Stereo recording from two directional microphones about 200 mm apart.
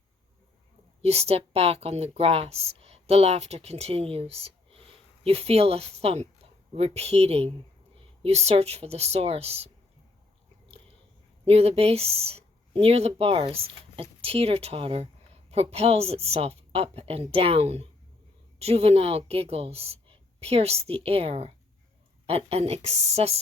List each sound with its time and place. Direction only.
1.0 s speech: 30° right (ahead or behind)
11.4 s a woman's voice: 30° right (ahead or behind)